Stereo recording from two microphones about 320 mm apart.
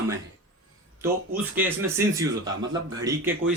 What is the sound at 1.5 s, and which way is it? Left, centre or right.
Speech, centre.